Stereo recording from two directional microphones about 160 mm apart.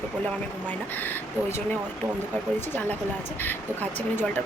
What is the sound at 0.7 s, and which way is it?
Speech, 10° left (ahead or behind).